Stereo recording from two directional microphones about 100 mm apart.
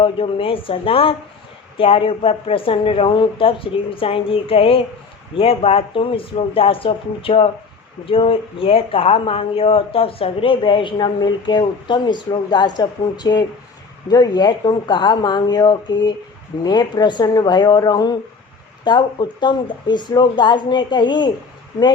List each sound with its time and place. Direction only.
0.0 s speech: 65° left (ahead or behind); by 21.3 s 50° left (ahead or behind)